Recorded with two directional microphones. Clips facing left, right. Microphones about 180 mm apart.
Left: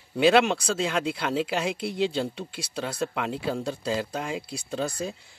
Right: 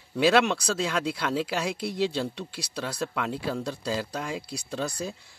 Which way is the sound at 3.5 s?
25° left (ahead or behind).